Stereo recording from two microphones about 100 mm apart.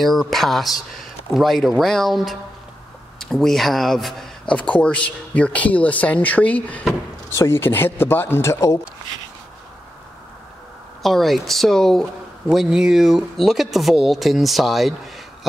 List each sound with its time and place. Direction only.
0.0 s speech: centre (ahead or behind)
7.2 s speech: 25° left (ahead or behind)
11.0 s speech: centre (ahead or behind)